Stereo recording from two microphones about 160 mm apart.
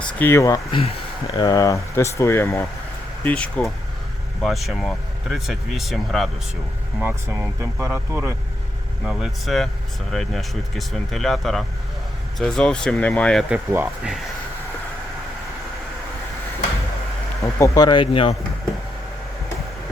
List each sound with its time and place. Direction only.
0.0 s speech: 10° left (ahead or behind)
0.7 s speech: 40° left (ahead or behind)
1.3 s speech: 25° left (ahead or behind); by 6.3 s centre (ahead or behind)
7.0 s speech: 10° right (ahead or behind)
9.0 s speech: centre (ahead or behind)
13.5 s speech: 5° right (ahead or behind)
17.4 s speech: 20° left (ahead or behind)